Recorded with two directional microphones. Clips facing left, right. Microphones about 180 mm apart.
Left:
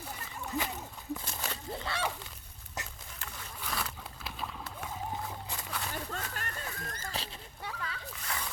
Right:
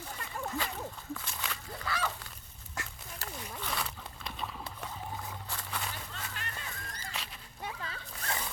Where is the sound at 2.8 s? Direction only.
20° left (ahead or behind).